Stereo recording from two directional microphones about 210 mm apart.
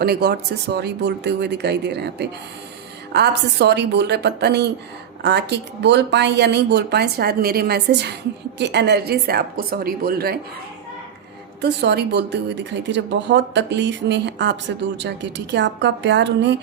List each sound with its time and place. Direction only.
0.0 s a woman's voice: 50° right (ahead or behind)
11.6 s speech: 50° right (ahead or behind)